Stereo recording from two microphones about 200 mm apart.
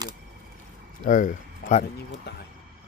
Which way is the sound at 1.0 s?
40° left (ahead or behind).